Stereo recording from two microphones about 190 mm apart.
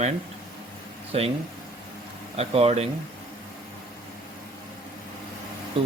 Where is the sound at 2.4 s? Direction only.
35° right (ahead or behind).